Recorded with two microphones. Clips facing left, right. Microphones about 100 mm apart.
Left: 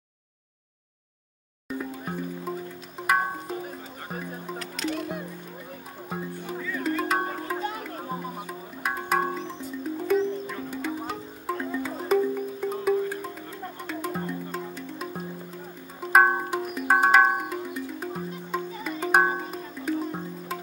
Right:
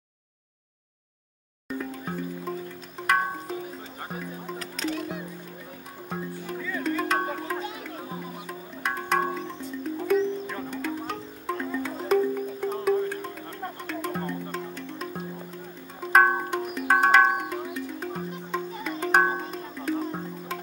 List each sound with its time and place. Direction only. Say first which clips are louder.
1.7 s music: even; 5° left (ahead or behind)
4.6 s music: even; 35° right (ahead or behind)
6.0 s music: even; 5° left (ahead or behind)